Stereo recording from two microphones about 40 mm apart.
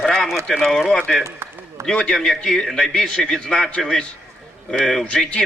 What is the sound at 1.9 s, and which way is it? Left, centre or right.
Speech, centre.